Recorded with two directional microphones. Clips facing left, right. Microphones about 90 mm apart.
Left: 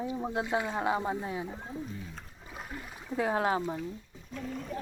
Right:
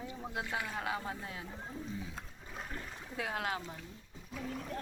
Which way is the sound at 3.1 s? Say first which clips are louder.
Left 9 dB; 30° left (ahead or behind).